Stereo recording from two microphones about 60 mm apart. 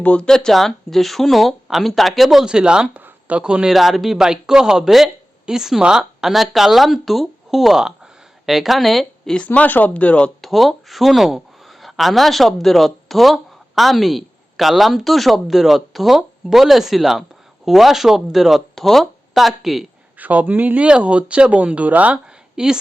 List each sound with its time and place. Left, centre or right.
0.0 s speech: left
0.3 s speech: centre
3.7 s speech: centre
9.5 s speech: left
10.4 s speech: centre
20.1 s speech: right
20.8 s speech: centre
22.5 s speech: centre